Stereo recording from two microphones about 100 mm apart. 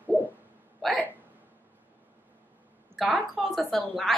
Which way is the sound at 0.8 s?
Centre (ahead or behind).